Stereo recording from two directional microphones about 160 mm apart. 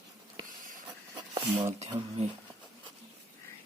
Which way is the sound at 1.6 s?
45° right (ahead or behind).